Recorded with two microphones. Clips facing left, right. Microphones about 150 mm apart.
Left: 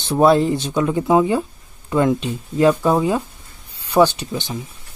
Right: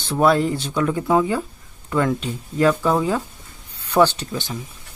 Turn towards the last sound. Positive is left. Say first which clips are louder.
# left 2 dB
turn(degrees=20)  # may be behind; listen again after turning